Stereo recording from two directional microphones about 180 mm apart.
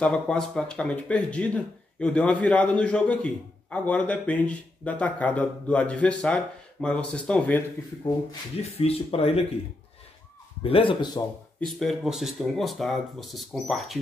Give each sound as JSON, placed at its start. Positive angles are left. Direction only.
{"t": 0.0, "sound": "speech", "side_deg": 5}
{"t": 8.0, "sound": "speech", "side_deg": 30}
{"t": 10.6, "sound": "a man's voice", "side_deg": 30}
{"t": 11.6, "sound": "speech", "side_deg": 0}